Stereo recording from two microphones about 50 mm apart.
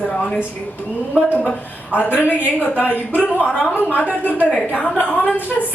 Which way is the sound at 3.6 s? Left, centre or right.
Left.